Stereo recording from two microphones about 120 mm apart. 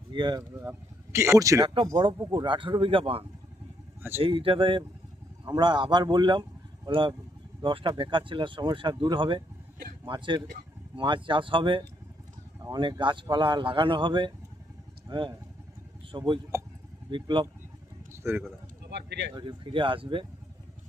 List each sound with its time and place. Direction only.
0.1 s speech: 35° right (ahead or behind)
0.7 s speech: 25° right (ahead or behind)
1.6 s speech: 45° right (ahead or behind)
1.9 s speech: 35° right (ahead or behind)
18.1 s a sound: 20° right (ahead or behind)
19.3 s speech: 40° right (ahead or behind)